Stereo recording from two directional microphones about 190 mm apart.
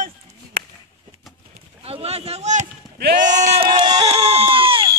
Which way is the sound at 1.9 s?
30° right (ahead or behind).